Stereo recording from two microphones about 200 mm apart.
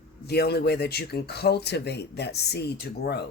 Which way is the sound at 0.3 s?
55° left (ahead or behind).